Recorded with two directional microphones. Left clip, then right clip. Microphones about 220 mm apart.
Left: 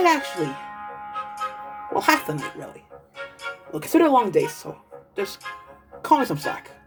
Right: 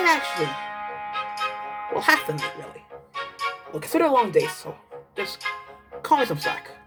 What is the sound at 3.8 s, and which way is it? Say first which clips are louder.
Speech: left 2 dB; 10° left (ahead or behind).